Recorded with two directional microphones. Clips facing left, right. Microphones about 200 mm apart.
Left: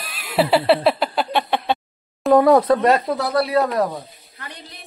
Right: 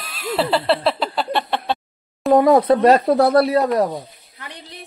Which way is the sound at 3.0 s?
60° right (ahead or behind).